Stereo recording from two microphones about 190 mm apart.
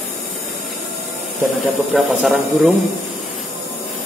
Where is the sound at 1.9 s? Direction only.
5° right (ahead or behind).